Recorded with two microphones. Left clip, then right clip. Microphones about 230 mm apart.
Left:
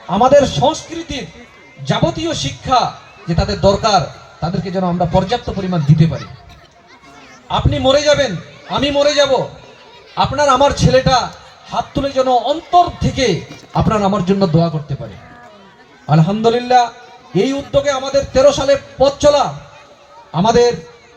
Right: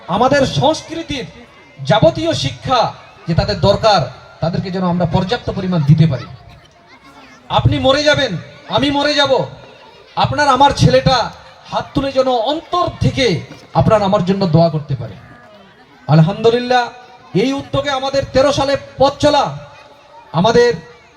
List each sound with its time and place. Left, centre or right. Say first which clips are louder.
0.1 s a man's voice: left 3 dB; right
7.4 s a man's voice: right 1 dB; right
16.0 s a man's voice: right 1 dB; right